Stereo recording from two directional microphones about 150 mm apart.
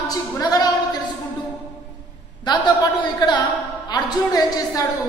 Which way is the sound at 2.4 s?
30° left (ahead or behind).